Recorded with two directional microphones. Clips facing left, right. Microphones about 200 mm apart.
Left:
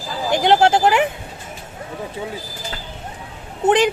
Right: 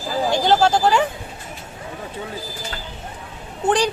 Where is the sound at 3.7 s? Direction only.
20° left (ahead or behind).